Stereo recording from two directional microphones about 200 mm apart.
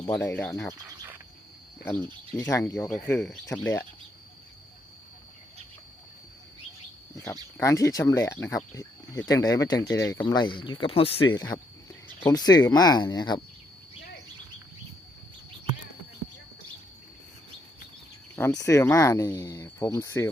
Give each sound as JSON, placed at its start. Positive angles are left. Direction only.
{"t": 0.0, "sound": "speech", "side_deg": 15}
{"t": 1.8, "sound": "speech", "side_deg": 10}
{"t": 7.6, "sound": "speech", "side_deg": 15}
{"t": 18.3, "sound": "speech", "side_deg": 15}